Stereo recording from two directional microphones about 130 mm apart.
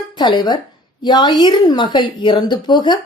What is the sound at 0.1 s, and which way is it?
Speech, 35° left (ahead or behind).